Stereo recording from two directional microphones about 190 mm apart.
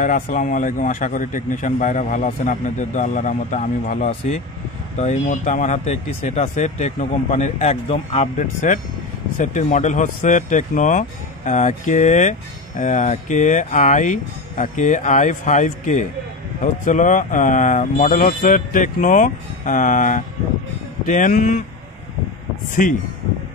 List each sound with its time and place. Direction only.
0.0 s speech: 45° left (ahead or behind)
22.8 s speech: 45° left (ahead or behind)